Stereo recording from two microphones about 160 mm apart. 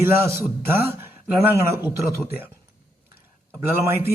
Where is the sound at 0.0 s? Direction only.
15° right (ahead or behind).